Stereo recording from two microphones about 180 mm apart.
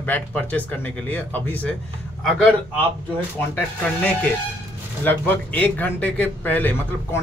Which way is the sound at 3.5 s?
5° left (ahead or behind).